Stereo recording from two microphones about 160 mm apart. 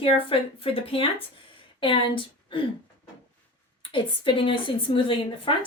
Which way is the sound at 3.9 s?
30° left (ahead or behind).